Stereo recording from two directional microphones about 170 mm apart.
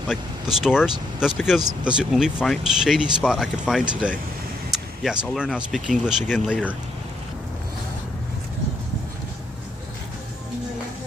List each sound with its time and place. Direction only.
0.1 s speech: 5° right (ahead or behind)